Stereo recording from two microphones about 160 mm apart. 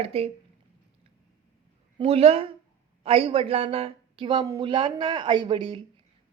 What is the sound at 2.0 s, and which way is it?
A woman's voice, 35° right (ahead or behind).